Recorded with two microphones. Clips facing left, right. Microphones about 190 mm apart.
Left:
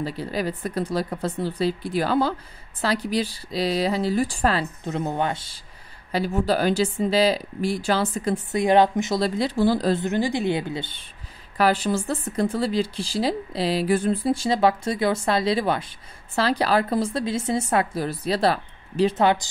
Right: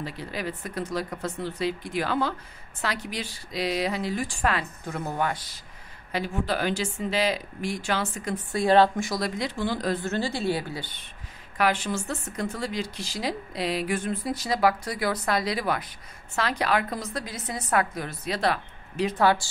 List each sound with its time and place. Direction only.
0.0 s speech: 35° left (ahead or behind)
6.1 s speech: 35° left (ahead or behind)
8.5 s speech: 20° left (ahead or behind)
10.0 s speech: 15° left (ahead or behind)
11.5 s speech: 35° left (ahead or behind)